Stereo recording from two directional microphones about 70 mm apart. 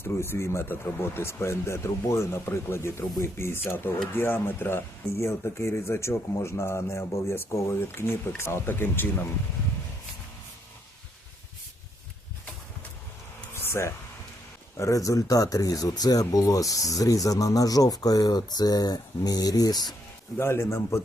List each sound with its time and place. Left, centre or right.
0.0 s speech: left
13.5 s air conditioning: left
14.8 s speech: left
20.4 s speech: left